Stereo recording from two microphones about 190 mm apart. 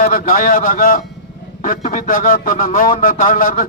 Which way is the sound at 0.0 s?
50° left (ahead or behind).